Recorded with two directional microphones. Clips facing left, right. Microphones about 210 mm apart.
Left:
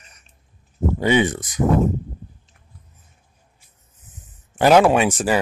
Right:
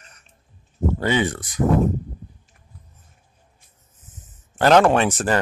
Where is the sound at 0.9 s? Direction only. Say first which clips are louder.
Left 4 dB; 15° left (ahead or behind).